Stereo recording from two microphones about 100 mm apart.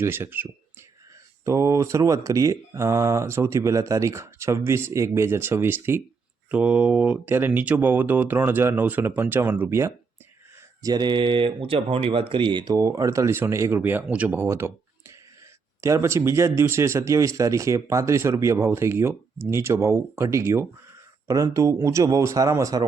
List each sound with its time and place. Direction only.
0.0 s speech: 25° right (ahead or behind)
10.8 s speech: 45° right (ahead or behind)
12.7 s speech: 35° right (ahead or behind); by 14.4 s 15° right (ahead or behind)
14.4 s speech: 30° right (ahead or behind)